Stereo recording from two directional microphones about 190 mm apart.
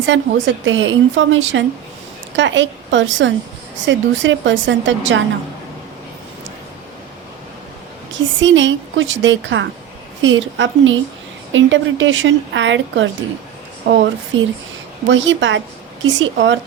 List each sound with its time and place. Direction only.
0.0 s a woman's voice: 75° right (ahead or behind)
8.4 s a woman's voice: 75° right (ahead or behind)
14.3 s a woman's voice: 85° right